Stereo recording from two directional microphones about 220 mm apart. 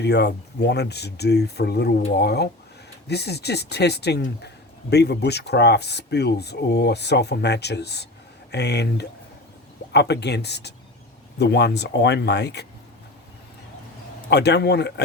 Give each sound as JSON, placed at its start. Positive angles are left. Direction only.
{"t": 0.0, "sound": "speech", "side_deg": 50}
{"t": 14.3, "sound": "speech", "side_deg": 50}